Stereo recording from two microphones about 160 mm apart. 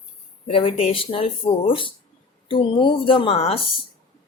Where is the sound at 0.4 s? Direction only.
35° left (ahead or behind).